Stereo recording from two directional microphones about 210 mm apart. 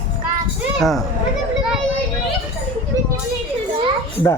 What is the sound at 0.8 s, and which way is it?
Speech, centre (ahead or behind).